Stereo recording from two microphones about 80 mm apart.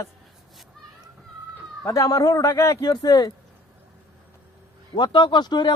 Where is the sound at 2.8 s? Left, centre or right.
Left.